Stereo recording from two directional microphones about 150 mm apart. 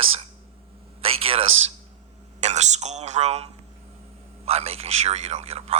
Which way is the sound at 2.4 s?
50° right (ahead or behind).